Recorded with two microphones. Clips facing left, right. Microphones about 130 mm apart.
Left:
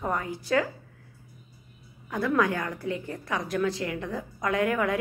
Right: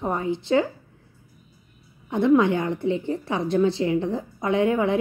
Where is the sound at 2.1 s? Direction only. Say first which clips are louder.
Right 7 dB; 25° right (ahead or behind).